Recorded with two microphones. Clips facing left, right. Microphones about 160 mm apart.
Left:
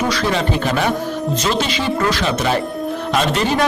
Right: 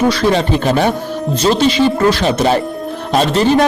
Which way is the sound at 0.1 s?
30° right (ahead or behind).